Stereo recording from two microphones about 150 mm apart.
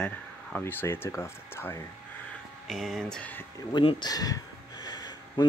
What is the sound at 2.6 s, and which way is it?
Speech, centre (ahead or behind).